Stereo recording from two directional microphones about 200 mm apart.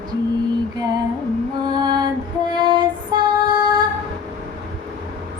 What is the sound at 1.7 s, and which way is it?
Female singing, 20° right (ahead or behind).